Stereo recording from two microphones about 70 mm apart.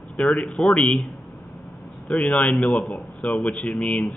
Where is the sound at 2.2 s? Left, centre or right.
Centre.